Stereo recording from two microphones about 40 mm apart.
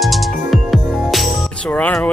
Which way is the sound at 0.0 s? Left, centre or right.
Centre.